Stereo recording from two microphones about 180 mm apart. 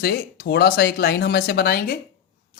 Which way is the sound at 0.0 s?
60° left (ahead or behind).